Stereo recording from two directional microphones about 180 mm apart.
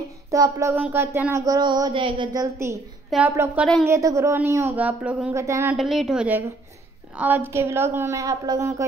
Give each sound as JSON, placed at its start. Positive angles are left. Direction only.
{"t": 0.3, "sound": "a sound", "side_deg": -15}
{"t": 3.3, "sound": "a woman's voice", "side_deg": -15}
{"t": 5.8, "sound": "a woman's voice", "side_deg": 0}